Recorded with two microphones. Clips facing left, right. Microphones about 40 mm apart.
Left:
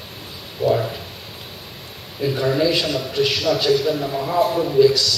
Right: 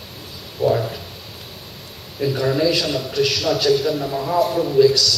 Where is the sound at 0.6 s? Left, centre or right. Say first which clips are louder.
Even; left.